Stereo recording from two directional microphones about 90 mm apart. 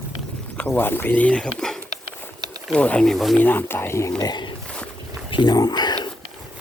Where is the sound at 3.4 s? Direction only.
20° left (ahead or behind).